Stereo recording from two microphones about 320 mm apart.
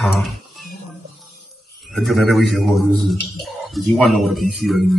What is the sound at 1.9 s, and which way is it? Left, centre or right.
A man's voice, centre.